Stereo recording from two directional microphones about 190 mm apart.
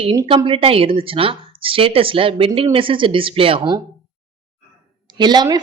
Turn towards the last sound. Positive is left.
turn(degrees=-20)  # may be behind; listen again after turning